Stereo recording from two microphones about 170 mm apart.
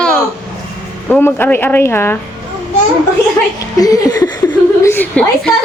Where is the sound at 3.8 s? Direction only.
20° left (ahead or behind).